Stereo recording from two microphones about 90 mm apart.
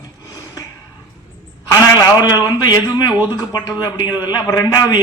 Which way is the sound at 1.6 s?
45° left (ahead or behind).